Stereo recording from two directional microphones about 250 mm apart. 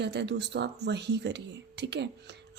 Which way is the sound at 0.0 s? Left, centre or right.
Right.